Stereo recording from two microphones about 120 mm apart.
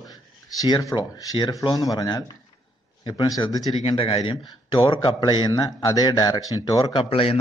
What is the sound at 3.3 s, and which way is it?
Speech, 35° left (ahead or behind).